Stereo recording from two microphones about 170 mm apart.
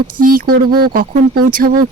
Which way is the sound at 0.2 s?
55° right (ahead or behind).